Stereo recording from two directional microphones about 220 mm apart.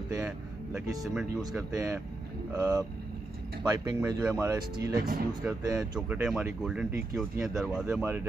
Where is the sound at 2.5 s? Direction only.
15° right (ahead or behind).